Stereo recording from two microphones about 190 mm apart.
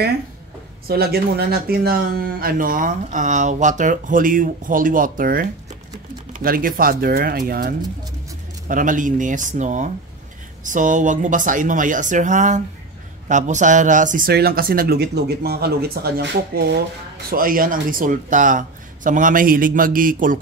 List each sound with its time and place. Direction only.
0.8 s speech: 55° right (ahead or behind)